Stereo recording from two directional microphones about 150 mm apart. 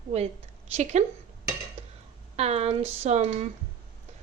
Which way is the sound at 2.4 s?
45° right (ahead or behind).